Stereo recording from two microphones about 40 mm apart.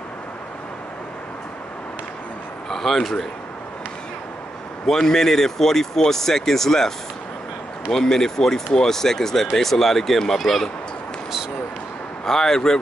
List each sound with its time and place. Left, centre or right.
2.7 s speech: centre
4.8 s speech: centre
7.9 s speech: centre
12.3 s speech: centre